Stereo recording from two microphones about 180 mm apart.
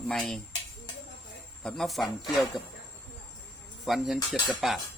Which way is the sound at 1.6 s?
Centre (ahead or behind).